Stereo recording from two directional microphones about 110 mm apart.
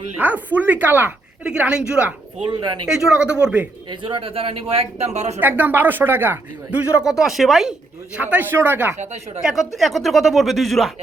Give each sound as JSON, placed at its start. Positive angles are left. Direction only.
{"t": 0.2, "sound": "speech", "side_deg": -15}
{"t": 2.5, "sound": "speech", "side_deg": -45}
{"t": 2.8, "sound": "speech", "side_deg": -5}
{"t": 4.1, "sound": "speech", "side_deg": -60}
{"t": 4.8, "sound": "speech", "side_deg": -80}
{"t": 5.4, "sound": "speech", "side_deg": -15}
{"t": 7.0, "sound": "speech", "side_deg": -5}
{"t": 9.0, "sound": "speech", "side_deg": -90}
{"t": 9.4, "sound": "speech", "side_deg": -5}